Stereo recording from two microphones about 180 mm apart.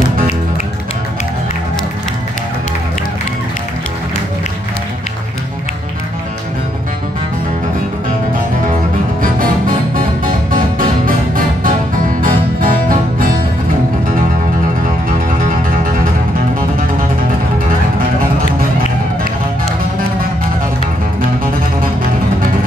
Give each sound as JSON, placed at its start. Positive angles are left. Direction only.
{"t": 9.2, "sound": "music", "side_deg": -50}
{"t": 15.0, "sound": "music", "side_deg": -50}